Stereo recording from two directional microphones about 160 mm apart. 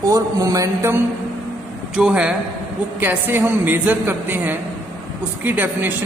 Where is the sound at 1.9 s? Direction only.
5° right (ahead or behind).